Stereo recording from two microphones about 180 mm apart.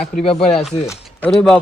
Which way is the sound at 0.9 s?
5° left (ahead or behind).